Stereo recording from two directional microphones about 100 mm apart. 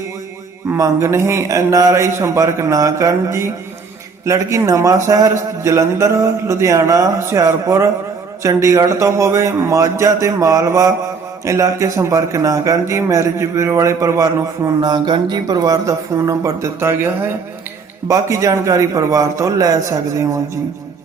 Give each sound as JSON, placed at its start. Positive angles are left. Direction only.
{"t": 0.8, "sound": "a man's voice", "side_deg": -30}
{"t": 18.1, "sound": "a man's voice", "side_deg": -35}